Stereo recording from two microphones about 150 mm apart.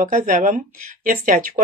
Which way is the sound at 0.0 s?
60° right (ahead or behind).